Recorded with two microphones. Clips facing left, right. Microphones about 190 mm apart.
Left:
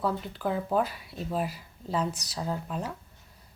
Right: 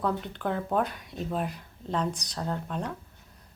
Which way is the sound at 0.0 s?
5° left (ahead or behind).